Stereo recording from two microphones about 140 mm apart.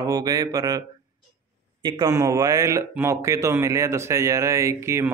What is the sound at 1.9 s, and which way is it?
Speech, 25° right (ahead or behind).